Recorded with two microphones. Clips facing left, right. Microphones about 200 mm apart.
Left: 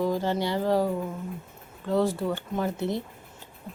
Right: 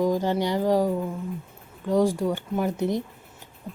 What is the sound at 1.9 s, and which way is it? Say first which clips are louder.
Speech: right 3 dB; 15° right (ahead or behind).